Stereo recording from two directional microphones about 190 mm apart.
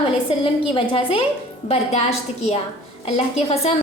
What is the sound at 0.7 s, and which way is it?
A woman's voice, 30° left (ahead or behind).